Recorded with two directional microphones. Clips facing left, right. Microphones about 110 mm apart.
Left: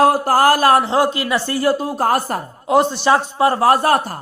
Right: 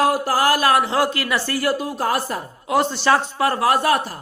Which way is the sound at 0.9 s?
20° left (ahead or behind).